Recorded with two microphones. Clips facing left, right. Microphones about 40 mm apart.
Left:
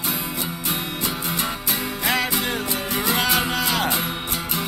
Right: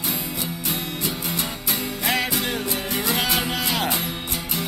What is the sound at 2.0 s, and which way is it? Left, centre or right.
Music, centre.